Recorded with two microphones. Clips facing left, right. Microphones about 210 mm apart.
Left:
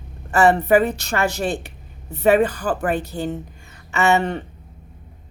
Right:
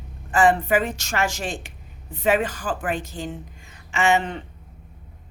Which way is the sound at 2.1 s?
65° left (ahead or behind).